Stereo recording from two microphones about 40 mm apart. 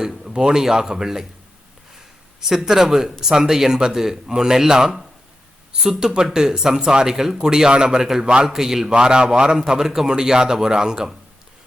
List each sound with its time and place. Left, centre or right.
0.0 s speech: centre
2.4 s speech: centre
8.2 s a man's voice: right
8.4 s speech: centre
8.9 s a man's voice: right